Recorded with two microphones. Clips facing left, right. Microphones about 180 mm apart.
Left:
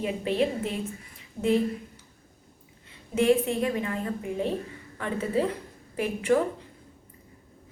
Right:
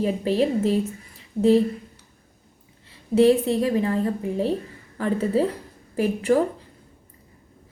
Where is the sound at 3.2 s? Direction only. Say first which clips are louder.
Right 5 dB; 35° right (ahead or behind).